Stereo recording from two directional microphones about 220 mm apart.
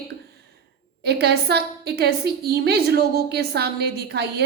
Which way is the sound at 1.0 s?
50° right (ahead or behind).